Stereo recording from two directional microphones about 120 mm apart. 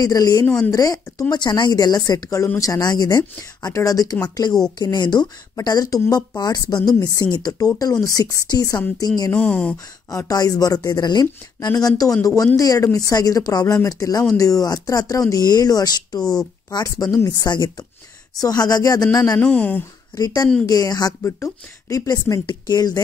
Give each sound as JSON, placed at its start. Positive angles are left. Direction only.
{"t": 0.0, "sound": "speech", "side_deg": 30}
{"t": 9.3, "sound": "speech", "side_deg": 10}
{"t": 10.1, "sound": "speech", "side_deg": 30}
{"t": 16.2, "sound": "speech", "side_deg": 5}
{"t": 16.7, "sound": "speech", "side_deg": 30}
{"t": 19.3, "sound": "speech", "side_deg": 10}
{"t": 20.2, "sound": "speech", "side_deg": 30}
{"t": 21.2, "sound": "speech", "side_deg": 20}